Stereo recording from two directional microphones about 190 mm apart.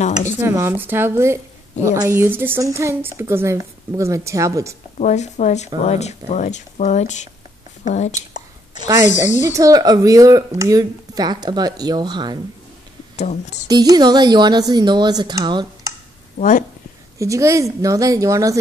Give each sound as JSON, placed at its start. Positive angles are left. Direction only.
{"t": 0.4, "sound": "a woman's voice", "side_deg": -15}
{"t": 4.9, "sound": "speech", "side_deg": 40}
{"t": 8.3, "sound": "a sound", "side_deg": -20}
{"t": 9.4, "sound": "speech", "side_deg": -15}
{"t": 13.1, "sound": "speech", "side_deg": 35}
{"t": 13.7, "sound": "speech", "side_deg": -20}
{"t": 16.3, "sound": "a woman's voice", "side_deg": 40}
{"t": 17.2, "sound": "a woman's voice", "side_deg": -15}